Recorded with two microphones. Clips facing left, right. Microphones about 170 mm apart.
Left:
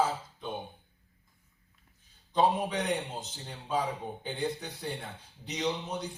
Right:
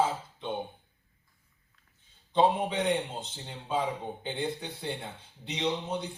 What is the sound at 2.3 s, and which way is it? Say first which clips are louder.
Speech: right 2 dB; 25° right (ahead or behind).